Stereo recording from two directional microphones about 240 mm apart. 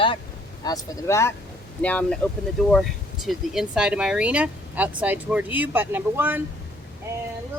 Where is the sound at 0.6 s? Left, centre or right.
Centre.